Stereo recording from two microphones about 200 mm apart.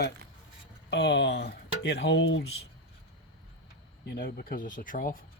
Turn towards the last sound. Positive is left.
turn(degrees=45)  # may be behind; listen again after turning